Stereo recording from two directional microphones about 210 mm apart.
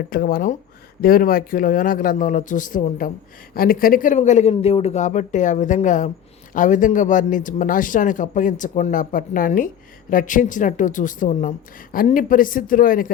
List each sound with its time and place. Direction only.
0.1 s speech: 45° left (ahead or behind)